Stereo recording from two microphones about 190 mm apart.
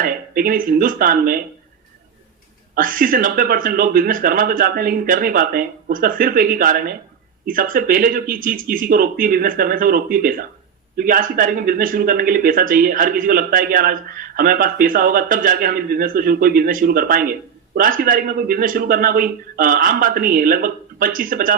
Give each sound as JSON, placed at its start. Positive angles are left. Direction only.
{"t": 0.0, "sound": "speech", "side_deg": -50}
{"t": 2.7, "sound": "speech", "side_deg": -45}